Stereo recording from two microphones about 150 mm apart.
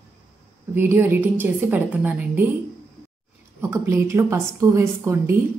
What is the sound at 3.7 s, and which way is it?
A woman's voice, 20° right (ahead or behind).